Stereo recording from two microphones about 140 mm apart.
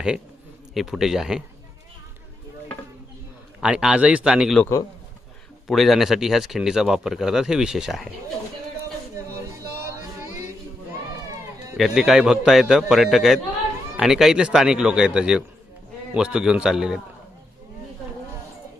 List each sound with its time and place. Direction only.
0.7 s speech: centre (ahead or behind)
3.6 s speech: 5° right (ahead or behind)
4.6 s a man's voice: 20° left (ahead or behind)
5.6 s speech: centre (ahead or behind)
9.1 s music: 20° right (ahead or behind)
11.8 s speech: centre (ahead or behind)